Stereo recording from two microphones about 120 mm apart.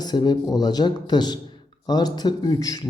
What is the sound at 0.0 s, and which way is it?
Speech, 35° left (ahead or behind).